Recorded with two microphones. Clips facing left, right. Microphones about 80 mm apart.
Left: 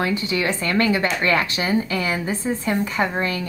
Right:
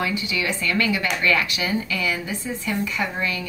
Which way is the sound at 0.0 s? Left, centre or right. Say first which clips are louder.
Left 3 dB; left.